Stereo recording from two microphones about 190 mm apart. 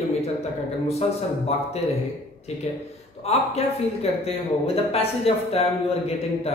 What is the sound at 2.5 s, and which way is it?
A man's voice, 35° left (ahead or behind).